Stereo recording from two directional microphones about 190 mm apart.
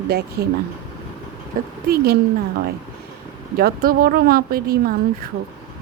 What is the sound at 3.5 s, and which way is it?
Speech, 50° right (ahead or behind).